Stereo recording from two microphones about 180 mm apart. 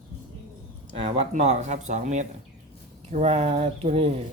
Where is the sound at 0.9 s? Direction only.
35° right (ahead or behind).